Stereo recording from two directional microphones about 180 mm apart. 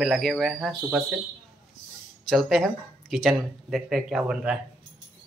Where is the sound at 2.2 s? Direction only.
Centre (ahead or behind).